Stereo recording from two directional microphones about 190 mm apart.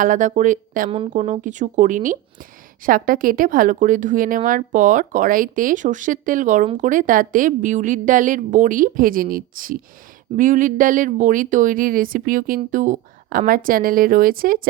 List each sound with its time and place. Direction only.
0.0 s speech: 40° right (ahead or behind)
0.9 s speech: 30° right (ahead or behind); by 14.7 s 50° right (ahead or behind)